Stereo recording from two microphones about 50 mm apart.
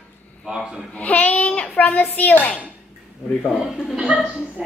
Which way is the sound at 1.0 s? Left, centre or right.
Left.